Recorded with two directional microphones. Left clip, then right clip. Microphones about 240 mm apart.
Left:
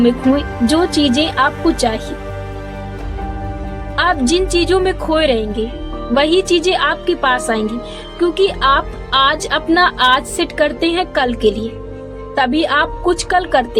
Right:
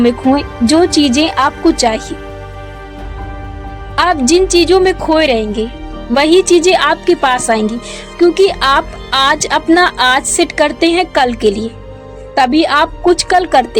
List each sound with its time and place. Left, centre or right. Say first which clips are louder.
0.7 s speech: right 5 dB; right
3.9 s speech: right 4 dB; right